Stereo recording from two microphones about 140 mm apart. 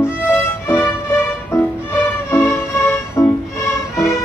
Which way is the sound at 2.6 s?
20° left (ahead or behind).